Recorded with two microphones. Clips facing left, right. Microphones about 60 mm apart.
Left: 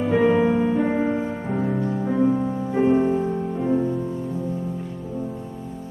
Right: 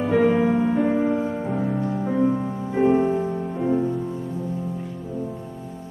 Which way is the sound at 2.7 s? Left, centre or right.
Centre.